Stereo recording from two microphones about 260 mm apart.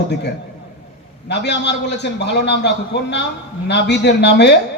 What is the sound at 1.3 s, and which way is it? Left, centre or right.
Speech, left.